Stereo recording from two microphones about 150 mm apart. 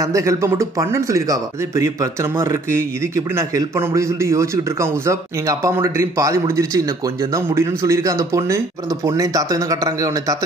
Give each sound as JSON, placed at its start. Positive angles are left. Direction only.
{"t": 0.0, "sound": "a man's voice", "side_deg": -20}